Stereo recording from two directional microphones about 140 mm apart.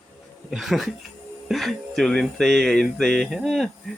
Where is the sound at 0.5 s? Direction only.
Centre (ahead or behind).